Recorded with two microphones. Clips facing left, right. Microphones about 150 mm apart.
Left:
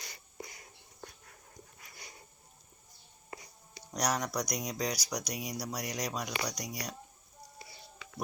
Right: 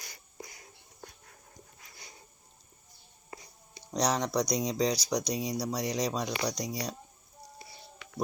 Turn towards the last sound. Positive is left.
turn(degrees=-30)  # may be behind; listen again after turning